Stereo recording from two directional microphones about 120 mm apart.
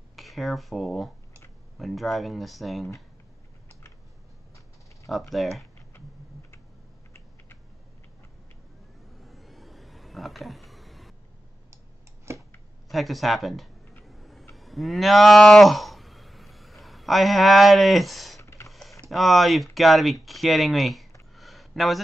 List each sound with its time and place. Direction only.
0.1 s speech: centre (ahead or behind)
5.3 s speech: centre (ahead or behind)
9.2 s vehicle: centre (ahead or behind)
12.3 s scissors: 20° right (ahead or behind)
12.9 s speech: centre (ahead or behind)
14.0 s vehicle: centre (ahead or behind)
14.5 s cattle: centre (ahead or behind)
18.4 s printer: 25° left (ahead or behind)
18.7 s typing: centre (ahead or behind)
19.0 s speech: centre (ahead or behind)
21.4 s a sound: centre (ahead or behind)